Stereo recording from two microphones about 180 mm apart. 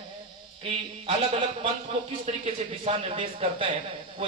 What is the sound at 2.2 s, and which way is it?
A man's voice, 35° right (ahead or behind).